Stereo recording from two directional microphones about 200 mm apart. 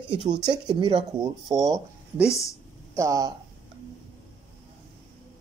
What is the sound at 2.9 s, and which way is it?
Speech, 15° right (ahead or behind).